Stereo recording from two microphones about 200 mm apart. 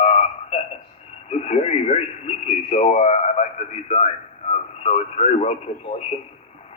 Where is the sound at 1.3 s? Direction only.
35° left (ahead or behind).